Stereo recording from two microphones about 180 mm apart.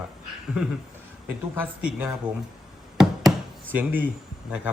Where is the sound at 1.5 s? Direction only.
5° right (ahead or behind).